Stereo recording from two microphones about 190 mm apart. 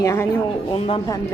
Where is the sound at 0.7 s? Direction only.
30° left (ahead or behind).